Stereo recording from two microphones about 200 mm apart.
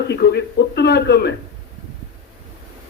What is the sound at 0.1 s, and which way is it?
A man's voice, 55° left (ahead or behind).